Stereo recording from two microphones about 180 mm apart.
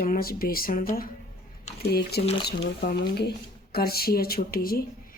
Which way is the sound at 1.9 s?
60° left (ahead or behind).